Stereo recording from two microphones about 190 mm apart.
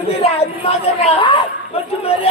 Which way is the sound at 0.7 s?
30° left (ahead or behind).